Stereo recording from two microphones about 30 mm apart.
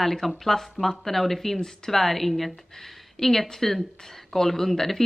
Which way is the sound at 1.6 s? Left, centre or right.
Centre.